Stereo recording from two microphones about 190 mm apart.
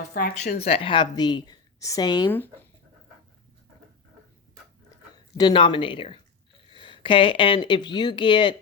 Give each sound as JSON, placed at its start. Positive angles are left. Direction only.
{"t": 0.1, "sound": "speech", "side_deg": 50}
{"t": 0.6, "sound": "a woman's voice", "side_deg": 30}
{"t": 5.1, "sound": "speech", "side_deg": 20}